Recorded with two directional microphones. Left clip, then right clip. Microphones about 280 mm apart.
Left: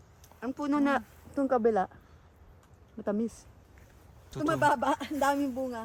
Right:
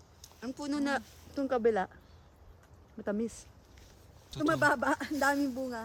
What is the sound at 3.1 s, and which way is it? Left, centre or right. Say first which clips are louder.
Speech: left 2 dB; left.